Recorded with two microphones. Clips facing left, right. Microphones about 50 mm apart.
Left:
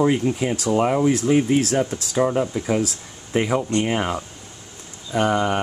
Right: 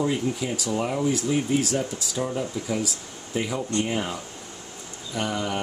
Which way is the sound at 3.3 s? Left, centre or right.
Left.